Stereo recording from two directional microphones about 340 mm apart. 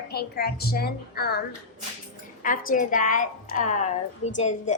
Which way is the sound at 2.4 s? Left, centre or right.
Left.